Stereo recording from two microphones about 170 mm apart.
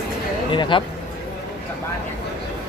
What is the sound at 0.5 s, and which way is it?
Speech, 30° left (ahead or behind).